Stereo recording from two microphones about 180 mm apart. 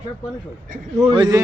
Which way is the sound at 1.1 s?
25° right (ahead or behind).